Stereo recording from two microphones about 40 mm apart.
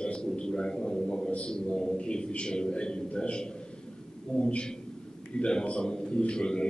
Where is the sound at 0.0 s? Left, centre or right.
Left.